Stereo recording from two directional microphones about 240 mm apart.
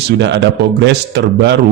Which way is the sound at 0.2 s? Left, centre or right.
Right.